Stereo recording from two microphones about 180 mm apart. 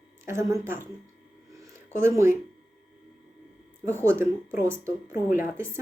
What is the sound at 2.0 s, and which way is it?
Speech, 15° right (ahead or behind).